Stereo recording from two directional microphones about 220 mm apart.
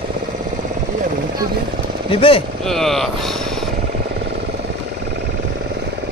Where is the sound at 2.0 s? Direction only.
25° left (ahead or behind).